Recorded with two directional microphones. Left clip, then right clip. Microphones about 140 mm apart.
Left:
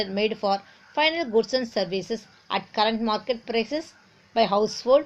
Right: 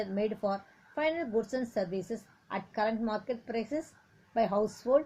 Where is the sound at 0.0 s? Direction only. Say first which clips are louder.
Left 7 dB; 35° left (ahead or behind).